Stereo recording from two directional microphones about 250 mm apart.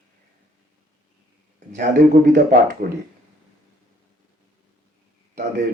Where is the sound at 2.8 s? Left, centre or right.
Right.